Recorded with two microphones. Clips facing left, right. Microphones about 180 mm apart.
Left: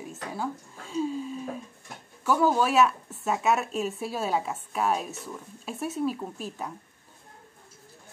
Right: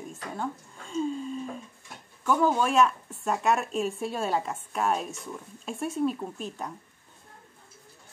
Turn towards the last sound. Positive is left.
turn(degrees=5)  # may be behind; listen again after turning